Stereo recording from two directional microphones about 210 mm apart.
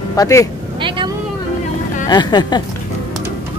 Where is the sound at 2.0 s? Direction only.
20° left (ahead or behind).